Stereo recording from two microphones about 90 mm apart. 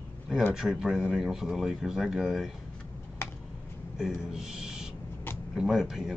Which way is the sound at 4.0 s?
5° right (ahead or behind).